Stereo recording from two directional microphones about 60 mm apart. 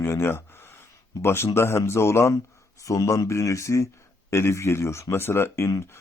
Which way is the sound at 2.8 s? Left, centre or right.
Left.